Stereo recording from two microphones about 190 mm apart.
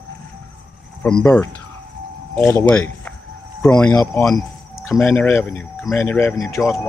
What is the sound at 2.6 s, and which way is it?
Speech, 10° left (ahead or behind).